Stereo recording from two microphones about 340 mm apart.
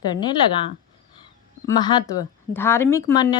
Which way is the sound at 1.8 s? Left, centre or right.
Centre.